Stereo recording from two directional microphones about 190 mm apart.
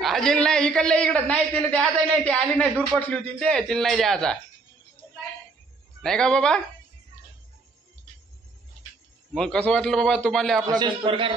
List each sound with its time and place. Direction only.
0.0 s a man's voice: centre (ahead or behind)
6.0 s a man's voice: 5° left (ahead or behind)
9.3 s a man's voice: 5° left (ahead or behind)
10.7 s a man's voice: 25° right (ahead or behind)